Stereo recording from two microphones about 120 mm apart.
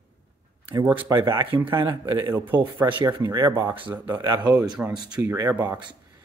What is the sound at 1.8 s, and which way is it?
Speech, 30° right (ahead or behind).